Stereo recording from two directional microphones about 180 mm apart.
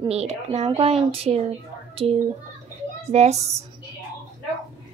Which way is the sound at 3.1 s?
40° right (ahead or behind).